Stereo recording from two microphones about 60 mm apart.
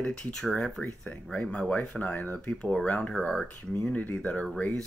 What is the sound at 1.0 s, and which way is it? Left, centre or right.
Speech, centre.